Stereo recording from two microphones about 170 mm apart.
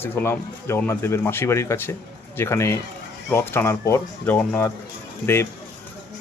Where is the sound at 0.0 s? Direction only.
15° left (ahead or behind).